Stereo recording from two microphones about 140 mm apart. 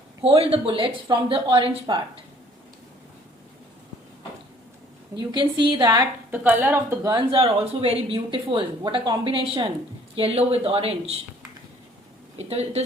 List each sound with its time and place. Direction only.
0.3 s speech: 45° right (ahead or behind)
5.1 s speech: 35° right (ahead or behind)
6.3 s a woman's voice: 10° right (ahead or behind)
7.3 s speech: 45° right (ahead or behind)
12.4 s speech: 50° right (ahead or behind)